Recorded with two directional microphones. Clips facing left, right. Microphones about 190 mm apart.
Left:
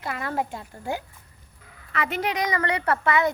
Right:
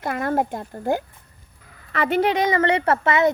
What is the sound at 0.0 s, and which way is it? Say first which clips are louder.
Speech: right 6 dB; 50° right (ahead or behind).